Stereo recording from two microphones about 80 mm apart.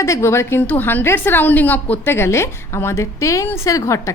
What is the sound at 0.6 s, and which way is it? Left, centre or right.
A woman's voice, left.